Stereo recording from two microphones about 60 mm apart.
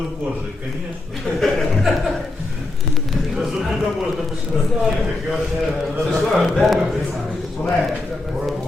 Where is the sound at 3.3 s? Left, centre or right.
Centre.